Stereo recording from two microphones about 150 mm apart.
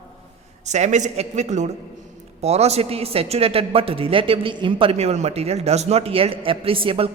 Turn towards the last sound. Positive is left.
turn(degrees=-35)  # may be behind; listen again after turning